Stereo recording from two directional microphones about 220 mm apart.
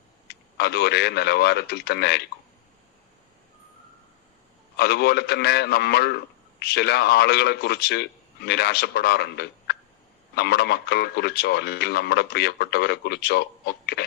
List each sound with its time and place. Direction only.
0.5 s speech: 45° left (ahead or behind)
4.8 s speech: 45° left (ahead or behind)